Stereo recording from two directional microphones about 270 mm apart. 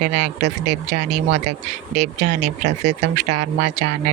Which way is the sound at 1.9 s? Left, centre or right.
Right.